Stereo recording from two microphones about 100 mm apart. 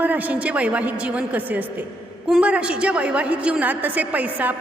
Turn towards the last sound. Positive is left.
turn(degrees=-15)  # may be behind; listen again after turning